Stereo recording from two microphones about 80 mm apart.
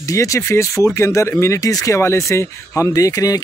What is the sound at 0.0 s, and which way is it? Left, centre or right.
Speech, left.